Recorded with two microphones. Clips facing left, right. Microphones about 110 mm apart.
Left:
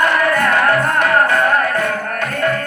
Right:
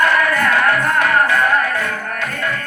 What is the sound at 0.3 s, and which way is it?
Music, 35° left (ahead or behind).